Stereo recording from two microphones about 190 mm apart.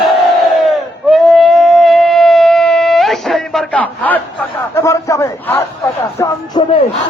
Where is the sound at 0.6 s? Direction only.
Centre (ahead or behind).